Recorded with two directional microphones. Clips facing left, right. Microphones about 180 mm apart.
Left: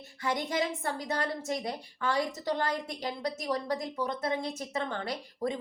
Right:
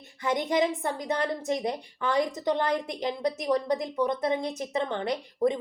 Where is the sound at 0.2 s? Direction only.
20° right (ahead or behind).